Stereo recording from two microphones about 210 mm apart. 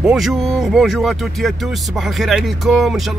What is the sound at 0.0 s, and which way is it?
Speech, centre (ahead or behind).